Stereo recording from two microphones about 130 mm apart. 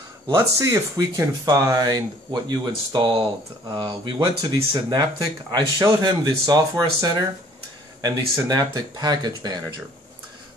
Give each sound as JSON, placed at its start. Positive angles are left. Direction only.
{"t": 0.3, "sound": "speech", "side_deg": -25}